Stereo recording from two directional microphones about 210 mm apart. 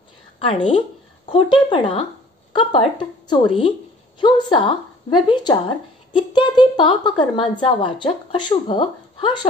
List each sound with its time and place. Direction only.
0.5 s a woman's voice: 25° left (ahead or behind)